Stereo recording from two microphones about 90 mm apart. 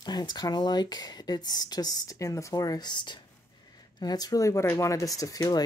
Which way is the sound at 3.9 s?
45° left (ahead or behind).